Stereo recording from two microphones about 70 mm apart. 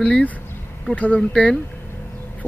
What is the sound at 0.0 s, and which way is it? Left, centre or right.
Speech, centre.